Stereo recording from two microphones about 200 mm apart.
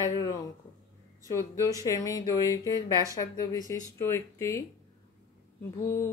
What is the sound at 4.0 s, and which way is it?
Speech, 15° left (ahead or behind).